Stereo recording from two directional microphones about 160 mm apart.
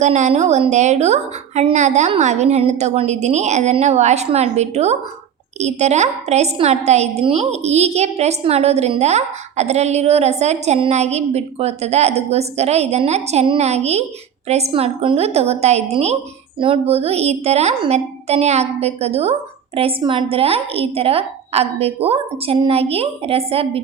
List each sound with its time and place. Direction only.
0.0 s a woman's voice: 45° right (ahead or behind)